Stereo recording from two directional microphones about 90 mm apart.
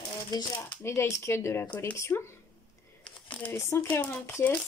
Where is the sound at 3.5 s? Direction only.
30° left (ahead or behind).